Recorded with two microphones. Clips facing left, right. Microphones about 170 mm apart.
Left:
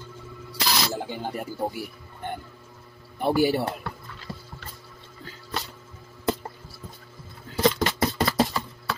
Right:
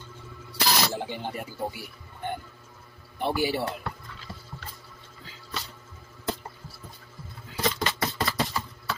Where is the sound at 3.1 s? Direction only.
45° left (ahead or behind).